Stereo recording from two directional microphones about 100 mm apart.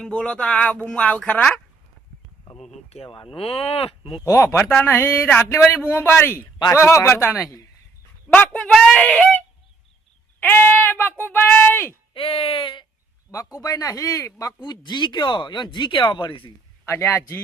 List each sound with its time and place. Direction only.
0.0 s speech: 10° left (ahead or behind)
2.6 s speech: 85° left; by 4.2 s 70° left (ahead or behind)
4.2 s speech: 25° left (ahead or behind)
8.3 s speech: 10° left (ahead or behind)
10.4 s speech: 20° left (ahead or behind)
12.1 s speech: 65° left (ahead or behind)
13.3 s a man's voice: 35° left (ahead or behind)
14.6 s speech: 45° left (ahead or behind)
16.8 s speech: 25° left (ahead or behind)